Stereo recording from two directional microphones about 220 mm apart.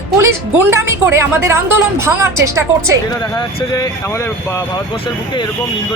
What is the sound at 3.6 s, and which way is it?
Speech, 15° left (ahead or behind).